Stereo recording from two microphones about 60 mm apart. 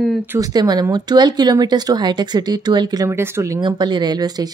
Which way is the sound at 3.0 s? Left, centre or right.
Right.